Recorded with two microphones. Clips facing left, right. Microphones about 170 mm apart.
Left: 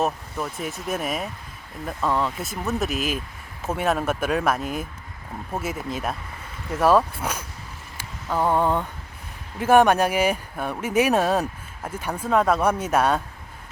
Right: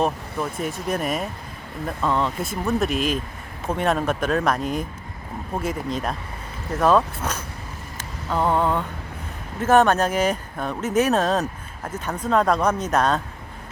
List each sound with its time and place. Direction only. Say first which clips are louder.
0.0 s speech: right 2 dB; centre (ahead or behind)
7.9 s a sound: right 1 dB; 10° left (ahead or behind)
9.6 s speech: even; 10° left (ahead or behind)